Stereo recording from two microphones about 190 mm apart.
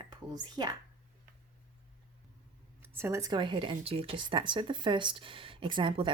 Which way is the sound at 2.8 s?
15° right (ahead or behind).